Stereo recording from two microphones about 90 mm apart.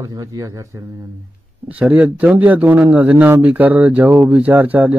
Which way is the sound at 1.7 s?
15° right (ahead or behind).